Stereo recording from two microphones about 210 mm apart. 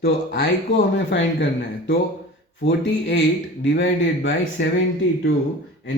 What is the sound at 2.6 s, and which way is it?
Speech, 60° left (ahead or behind).